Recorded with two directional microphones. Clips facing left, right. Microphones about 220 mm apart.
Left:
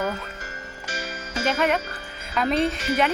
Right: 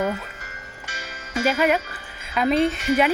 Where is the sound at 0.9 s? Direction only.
30° left (ahead or behind).